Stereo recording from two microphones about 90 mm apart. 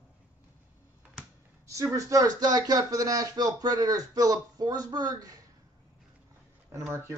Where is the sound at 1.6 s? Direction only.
35° right (ahead or behind).